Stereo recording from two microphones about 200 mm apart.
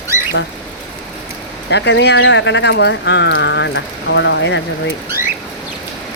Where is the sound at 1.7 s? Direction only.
60° left (ahead or behind).